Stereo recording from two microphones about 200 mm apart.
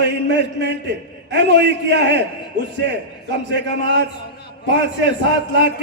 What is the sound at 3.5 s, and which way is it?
Speech, 60° right (ahead or behind).